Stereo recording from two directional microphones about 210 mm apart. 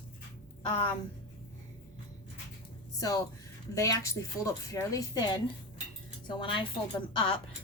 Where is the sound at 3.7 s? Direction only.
15° left (ahead or behind).